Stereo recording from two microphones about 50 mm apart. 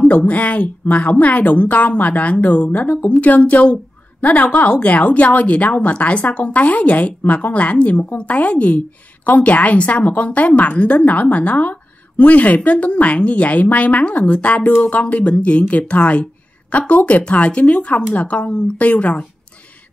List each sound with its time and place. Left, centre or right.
0.0 s a woman's voice: left